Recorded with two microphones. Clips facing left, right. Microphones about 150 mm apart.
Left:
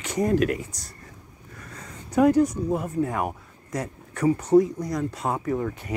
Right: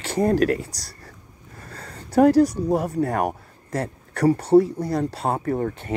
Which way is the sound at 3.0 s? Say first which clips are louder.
Right 3 dB; 70° right (ahead or behind).